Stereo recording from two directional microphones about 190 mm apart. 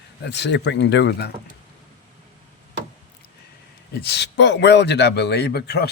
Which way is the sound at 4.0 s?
60° left (ahead or behind).